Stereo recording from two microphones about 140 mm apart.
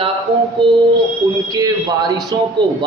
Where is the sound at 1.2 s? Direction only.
25° right (ahead or behind).